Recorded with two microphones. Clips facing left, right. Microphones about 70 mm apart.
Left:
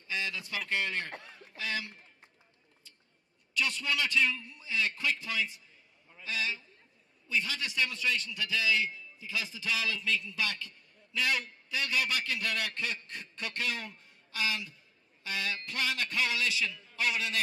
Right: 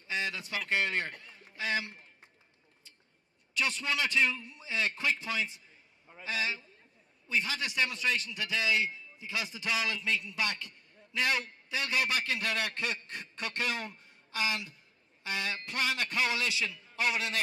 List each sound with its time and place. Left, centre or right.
0.1 s a sound: right
0.7 s a man's voice: right
3.5 s a man's voice: right